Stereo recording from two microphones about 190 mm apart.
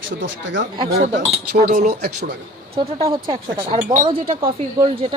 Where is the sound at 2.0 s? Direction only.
55° right (ahead or behind).